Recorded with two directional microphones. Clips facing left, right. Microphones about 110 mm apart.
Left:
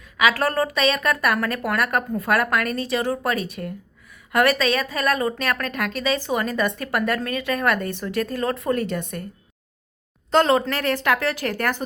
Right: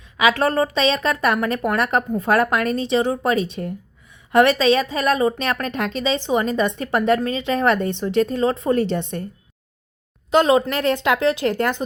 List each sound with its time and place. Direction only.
0.2 s a woman's voice: 25° right (ahead or behind)
10.3 s a woman's voice: 15° right (ahead or behind)